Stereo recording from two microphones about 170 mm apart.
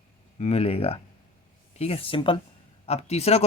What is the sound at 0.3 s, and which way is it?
Speech, 40° left (ahead or behind).